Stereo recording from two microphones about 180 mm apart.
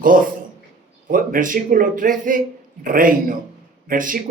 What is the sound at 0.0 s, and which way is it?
A man's voice, 50° right (ahead or behind).